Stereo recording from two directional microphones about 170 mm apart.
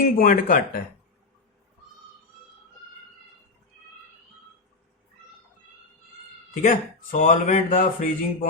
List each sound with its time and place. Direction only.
0.0 s speech: 55° left (ahead or behind)
6.5 s speech: 50° left (ahead or behind)